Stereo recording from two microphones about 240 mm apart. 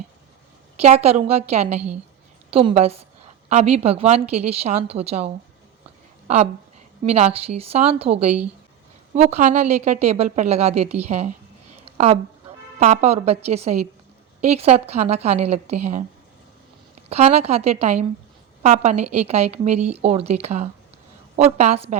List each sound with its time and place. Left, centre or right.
0.8 s a woman's voice: right
11.9 s a sound: right
12.8 s a woman's voice: right
17.1 s a woman's voice: right